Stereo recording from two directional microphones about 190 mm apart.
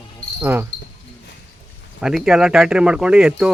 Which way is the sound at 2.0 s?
Centre (ahead or behind).